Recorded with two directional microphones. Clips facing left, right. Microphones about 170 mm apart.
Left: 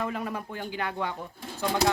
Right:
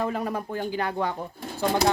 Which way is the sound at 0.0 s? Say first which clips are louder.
Right 4 dB; 40° right (ahead or behind).